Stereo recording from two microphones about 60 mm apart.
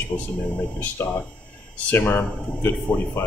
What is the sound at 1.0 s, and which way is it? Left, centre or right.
Speech, left.